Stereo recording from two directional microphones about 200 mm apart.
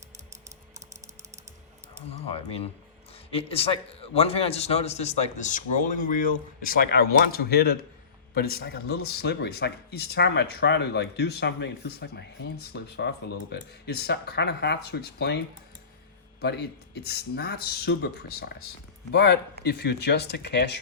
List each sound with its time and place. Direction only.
2.2 s a man's voice: 30° left (ahead or behind); by 15.4 s 55° left (ahead or behind)
16.4 s speech: 55° left (ahead or behind)